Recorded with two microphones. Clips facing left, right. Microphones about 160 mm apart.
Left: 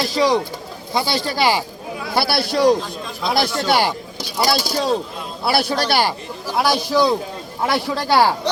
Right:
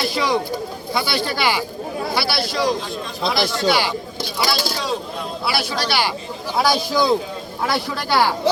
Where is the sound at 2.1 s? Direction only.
55° left (ahead or behind).